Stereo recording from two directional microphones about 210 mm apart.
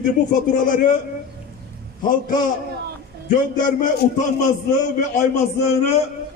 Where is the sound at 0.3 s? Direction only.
40° left (ahead or behind).